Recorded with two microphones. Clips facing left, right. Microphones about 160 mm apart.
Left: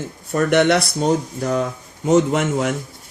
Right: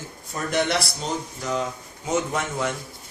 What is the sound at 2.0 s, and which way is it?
Speech, 80° left.